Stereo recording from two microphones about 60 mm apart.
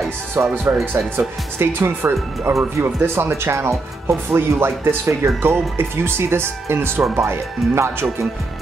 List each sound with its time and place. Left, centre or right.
0.3 s speech: right